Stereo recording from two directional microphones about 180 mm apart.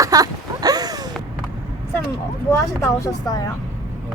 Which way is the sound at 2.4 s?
15° left (ahead or behind).